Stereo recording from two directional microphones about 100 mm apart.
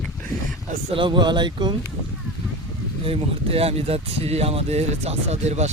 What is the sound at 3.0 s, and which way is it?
Speech, 75° right (ahead or behind).